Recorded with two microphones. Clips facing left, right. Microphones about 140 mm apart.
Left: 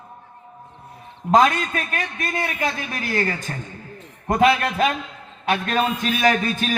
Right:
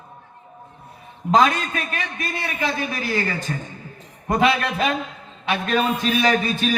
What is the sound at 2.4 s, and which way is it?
Speech, 45° left (ahead or behind).